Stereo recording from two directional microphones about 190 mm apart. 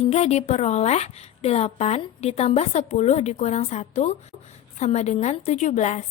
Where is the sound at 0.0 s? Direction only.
35° left (ahead or behind).